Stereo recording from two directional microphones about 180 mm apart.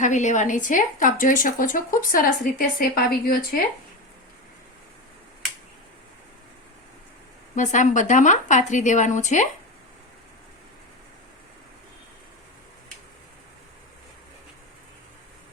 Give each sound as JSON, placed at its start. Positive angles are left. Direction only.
{"t": 0.0, "sound": "a woman's voice", "side_deg": 40}
{"t": 7.5, "sound": "a woman's voice", "side_deg": 45}